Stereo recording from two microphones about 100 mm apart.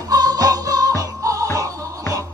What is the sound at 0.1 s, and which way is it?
Music, 40° right (ahead or behind).